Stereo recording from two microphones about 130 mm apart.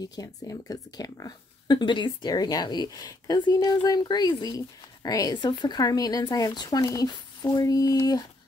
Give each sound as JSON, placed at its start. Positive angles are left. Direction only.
{"t": 0.0, "sound": "a woman's voice", "side_deg": 30}